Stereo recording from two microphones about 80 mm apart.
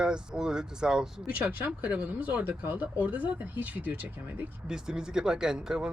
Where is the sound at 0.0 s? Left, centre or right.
Centre.